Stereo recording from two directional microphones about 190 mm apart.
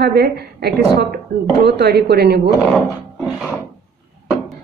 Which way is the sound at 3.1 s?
Centre (ahead or behind).